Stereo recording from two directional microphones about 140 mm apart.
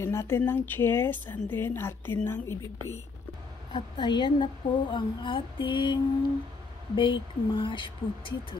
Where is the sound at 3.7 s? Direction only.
35° left (ahead or behind).